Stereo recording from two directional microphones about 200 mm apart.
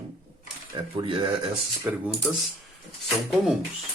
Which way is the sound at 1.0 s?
25° right (ahead or behind).